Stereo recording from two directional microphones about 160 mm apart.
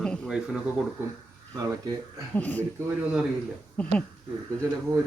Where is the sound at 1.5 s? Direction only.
20° right (ahead or behind).